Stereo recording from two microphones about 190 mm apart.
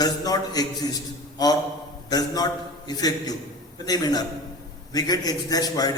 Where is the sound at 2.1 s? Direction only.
20° left (ahead or behind).